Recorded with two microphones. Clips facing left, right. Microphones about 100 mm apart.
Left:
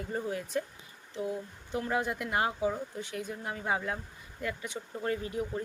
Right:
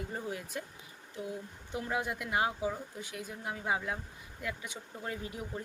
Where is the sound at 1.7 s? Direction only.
10° right (ahead or behind).